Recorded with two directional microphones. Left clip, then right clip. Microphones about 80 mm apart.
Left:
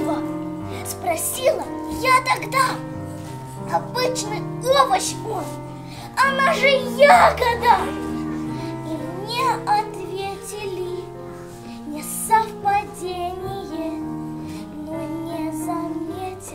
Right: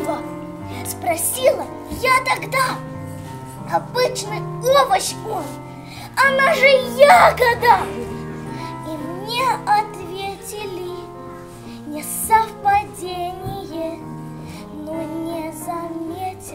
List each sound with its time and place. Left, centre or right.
1.0 s a child's voice: right
8.5 s music: right
15.2 s music: right